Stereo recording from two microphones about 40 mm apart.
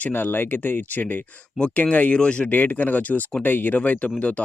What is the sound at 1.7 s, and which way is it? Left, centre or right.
Speech, left.